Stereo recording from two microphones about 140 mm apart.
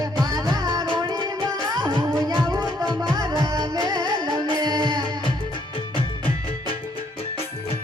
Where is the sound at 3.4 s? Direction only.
30° right (ahead or behind).